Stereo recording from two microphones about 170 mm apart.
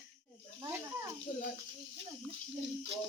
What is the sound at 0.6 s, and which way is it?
Speech, 15° right (ahead or behind).